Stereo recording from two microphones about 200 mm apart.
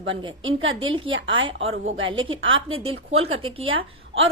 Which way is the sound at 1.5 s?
80° right.